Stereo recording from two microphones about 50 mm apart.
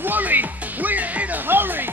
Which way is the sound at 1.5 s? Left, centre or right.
Right.